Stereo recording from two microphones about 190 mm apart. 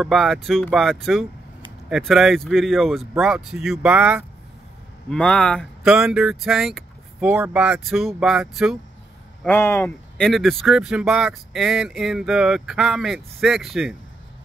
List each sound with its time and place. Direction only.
0.0 s speech: centre (ahead or behind)
5.1 s speech: 5° left (ahead or behind)
9.4 s speech: 10° left (ahead or behind)